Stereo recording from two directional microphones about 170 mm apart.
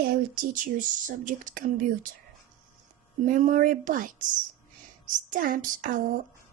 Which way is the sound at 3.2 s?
50° right (ahead or behind).